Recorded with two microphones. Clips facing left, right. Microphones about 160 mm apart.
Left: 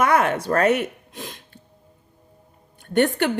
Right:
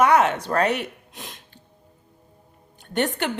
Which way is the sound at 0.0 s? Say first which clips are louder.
Right 1 dB; 50° left (ahead or behind).